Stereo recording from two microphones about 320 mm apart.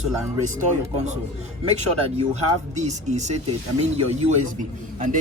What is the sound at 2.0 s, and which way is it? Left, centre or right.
Speech, centre.